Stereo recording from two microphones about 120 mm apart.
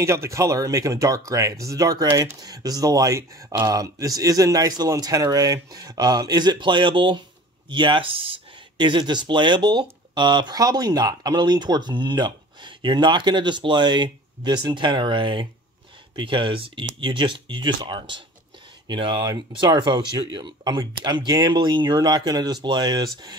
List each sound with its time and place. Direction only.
0.0 s speech: 25° right (ahead or behind)